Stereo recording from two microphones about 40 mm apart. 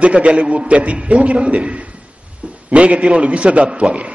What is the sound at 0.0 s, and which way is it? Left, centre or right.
A man's voice, right.